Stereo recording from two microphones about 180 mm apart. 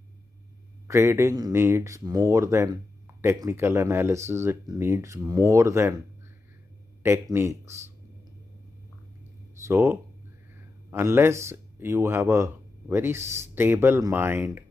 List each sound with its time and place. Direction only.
0.8 s speech: 15° right (ahead or behind)
7.0 s a man's voice: 15° right (ahead or behind)
9.7 s speech: 15° right (ahead or behind)